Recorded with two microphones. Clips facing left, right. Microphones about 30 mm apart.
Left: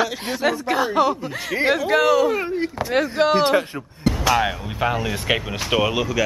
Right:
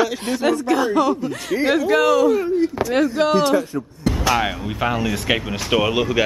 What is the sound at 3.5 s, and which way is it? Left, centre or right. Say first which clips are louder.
Speech: right 1 dB; left.